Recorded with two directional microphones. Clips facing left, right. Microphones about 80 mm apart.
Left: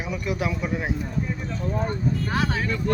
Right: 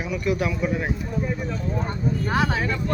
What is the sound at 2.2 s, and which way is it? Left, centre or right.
Speech, right.